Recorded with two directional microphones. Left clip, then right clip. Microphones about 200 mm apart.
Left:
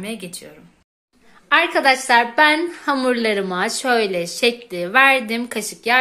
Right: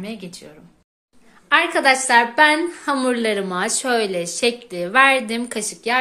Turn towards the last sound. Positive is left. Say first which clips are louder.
# left 3 dB
turn(degrees=0)  # may be behind; listen again after turning